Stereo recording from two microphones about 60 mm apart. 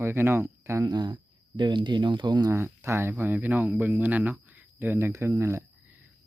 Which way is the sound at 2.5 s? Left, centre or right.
Right.